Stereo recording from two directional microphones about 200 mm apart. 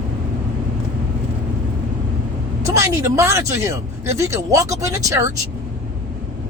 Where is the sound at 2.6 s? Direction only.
15° right (ahead or behind).